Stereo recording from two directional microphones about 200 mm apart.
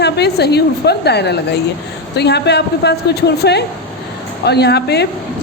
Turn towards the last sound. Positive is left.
turn(degrees=55)  # may be behind; listen again after turning